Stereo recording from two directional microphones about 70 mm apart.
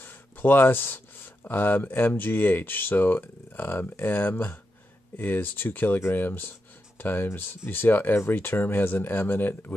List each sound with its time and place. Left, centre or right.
0.0 s speech: left